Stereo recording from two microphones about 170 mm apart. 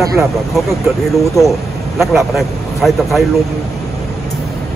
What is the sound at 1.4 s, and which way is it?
Speech, centre (ahead or behind).